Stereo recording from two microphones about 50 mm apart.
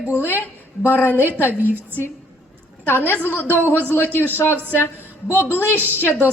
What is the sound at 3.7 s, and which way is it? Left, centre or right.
Speech, left.